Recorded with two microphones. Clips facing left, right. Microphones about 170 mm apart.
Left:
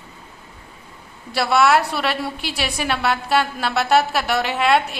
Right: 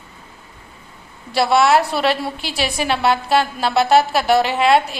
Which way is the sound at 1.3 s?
30° right (ahead or behind).